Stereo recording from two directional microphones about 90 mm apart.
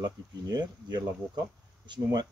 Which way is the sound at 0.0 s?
50° right (ahead or behind).